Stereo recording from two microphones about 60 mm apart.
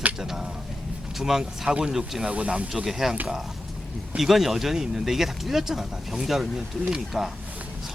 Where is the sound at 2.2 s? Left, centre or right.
Centre.